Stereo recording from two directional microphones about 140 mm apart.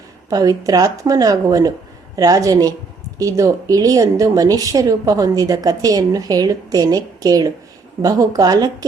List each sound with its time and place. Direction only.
0.3 s a woman's voice: 25° right (ahead or behind)